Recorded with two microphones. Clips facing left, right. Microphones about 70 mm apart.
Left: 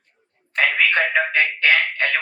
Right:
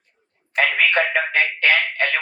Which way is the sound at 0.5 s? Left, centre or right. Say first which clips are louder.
Even; right.